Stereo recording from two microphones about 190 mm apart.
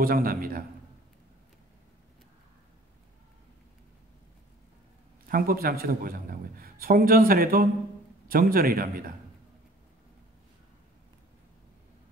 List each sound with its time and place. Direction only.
0.0 s a man's voice: 50° right (ahead or behind)
5.3 s a man's voice: 50° right (ahead or behind)